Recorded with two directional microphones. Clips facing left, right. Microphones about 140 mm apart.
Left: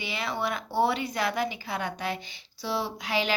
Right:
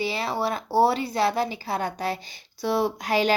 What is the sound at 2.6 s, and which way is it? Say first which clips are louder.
Speech: right 7 dB; 50° right (ahead or behind).